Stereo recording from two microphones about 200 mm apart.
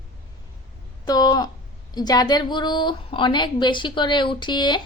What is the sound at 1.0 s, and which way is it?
A woman's voice, 20° left (ahead or behind).